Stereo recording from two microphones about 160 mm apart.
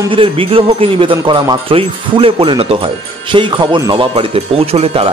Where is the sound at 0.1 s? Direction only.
35° right (ahead or behind).